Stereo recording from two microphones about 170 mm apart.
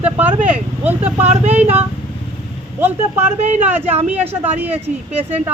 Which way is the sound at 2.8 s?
10° right (ahead or behind).